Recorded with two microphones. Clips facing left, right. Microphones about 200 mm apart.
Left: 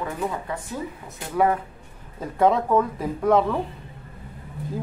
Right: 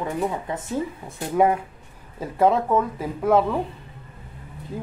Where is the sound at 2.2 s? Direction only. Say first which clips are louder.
Even; centre (ahead or behind).